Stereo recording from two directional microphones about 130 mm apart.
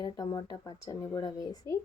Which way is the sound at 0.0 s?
35° left (ahead or behind).